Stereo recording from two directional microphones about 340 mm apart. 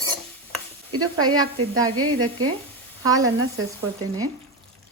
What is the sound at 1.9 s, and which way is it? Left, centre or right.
Speech, right.